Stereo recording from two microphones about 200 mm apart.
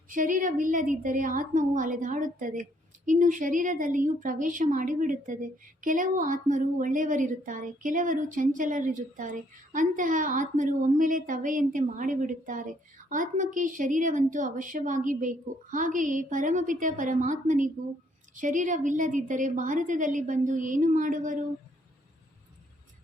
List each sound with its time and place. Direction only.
0.1 s a woman's voice: 40° right (ahead or behind)